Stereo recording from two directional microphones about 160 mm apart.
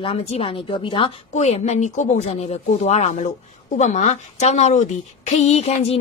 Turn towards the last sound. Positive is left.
turn(degrees=40)  # may be behind; listen again after turning